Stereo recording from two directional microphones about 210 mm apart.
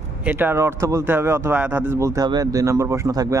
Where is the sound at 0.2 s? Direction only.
10° right (ahead or behind).